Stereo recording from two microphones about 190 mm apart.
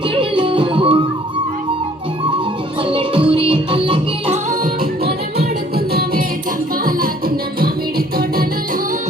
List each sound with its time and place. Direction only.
0.2 s music: 25° right (ahead or behind)
2.9 s music: 30° right (ahead or behind)
5.9 s music: 55° right (ahead or behind)